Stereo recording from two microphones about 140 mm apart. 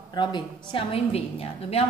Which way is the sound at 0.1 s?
35° left (ahead or behind).